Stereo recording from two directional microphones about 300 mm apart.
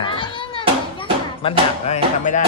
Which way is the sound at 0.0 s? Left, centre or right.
Centre.